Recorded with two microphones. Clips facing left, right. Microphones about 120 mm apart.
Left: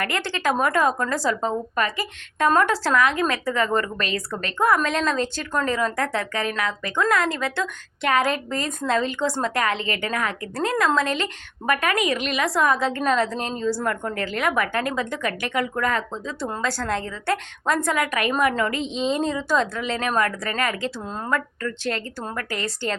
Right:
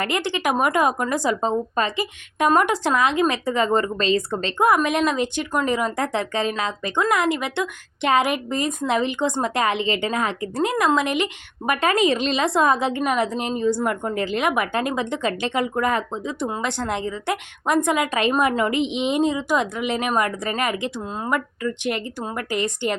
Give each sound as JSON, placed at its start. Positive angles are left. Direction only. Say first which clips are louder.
{"t": 0.0, "sound": "a woman's voice", "louder": "right 2 dB", "side_deg": -20}
{"t": 21.0, "sound": "a woman's voice", "louder": "right 1 dB", "side_deg": -5}